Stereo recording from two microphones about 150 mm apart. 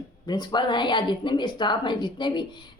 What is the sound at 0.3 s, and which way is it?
A woman's voice, 30° left (ahead or behind).